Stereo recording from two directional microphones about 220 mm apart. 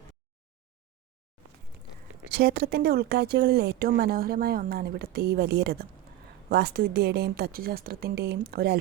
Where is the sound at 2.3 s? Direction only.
45° right (ahead or behind).